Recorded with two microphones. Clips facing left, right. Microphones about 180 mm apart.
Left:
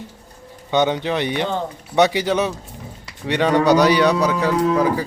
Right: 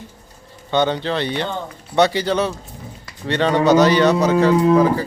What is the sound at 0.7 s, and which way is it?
A man's voice, 15° left (ahead or behind).